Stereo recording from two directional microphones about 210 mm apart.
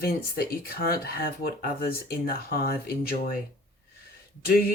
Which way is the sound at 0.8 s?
45° left (ahead or behind).